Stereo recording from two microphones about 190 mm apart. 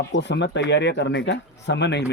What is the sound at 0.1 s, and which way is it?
Speech, 65° left (ahead or behind).